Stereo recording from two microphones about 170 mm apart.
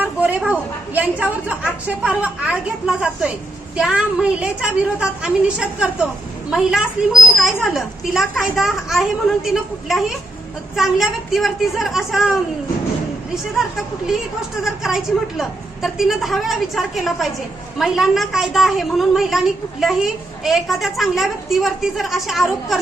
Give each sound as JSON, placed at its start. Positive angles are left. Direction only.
{"t": 0.0, "sound": "a woman's voice", "side_deg": -10}